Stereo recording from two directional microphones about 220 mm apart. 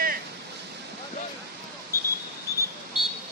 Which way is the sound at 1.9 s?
15° left (ahead or behind).